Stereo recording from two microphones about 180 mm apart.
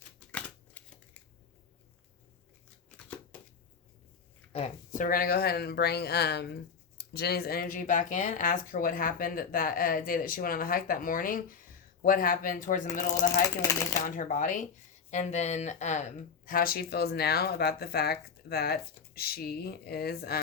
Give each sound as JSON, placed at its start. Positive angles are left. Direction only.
{"t": 0.3, "sound": "scissors", "side_deg": 10}
{"t": 4.9, "sound": "speech", "side_deg": 50}
{"t": 13.6, "sound": "speech", "side_deg": 20}
{"t": 14.0, "sound": "speech", "side_deg": 50}